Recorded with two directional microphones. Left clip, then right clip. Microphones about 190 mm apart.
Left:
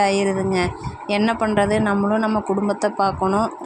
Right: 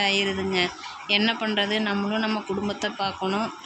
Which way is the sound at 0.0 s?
35° left (ahead or behind).